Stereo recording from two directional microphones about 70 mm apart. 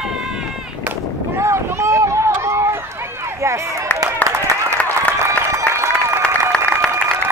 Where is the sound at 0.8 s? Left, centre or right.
Right.